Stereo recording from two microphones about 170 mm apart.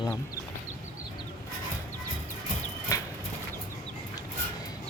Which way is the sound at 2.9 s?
20° left (ahead or behind).